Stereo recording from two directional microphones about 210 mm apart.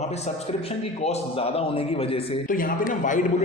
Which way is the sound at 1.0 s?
30° left (ahead or behind).